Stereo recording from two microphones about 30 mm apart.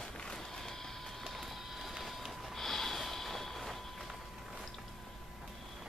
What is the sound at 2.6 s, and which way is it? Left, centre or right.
Snort, centre.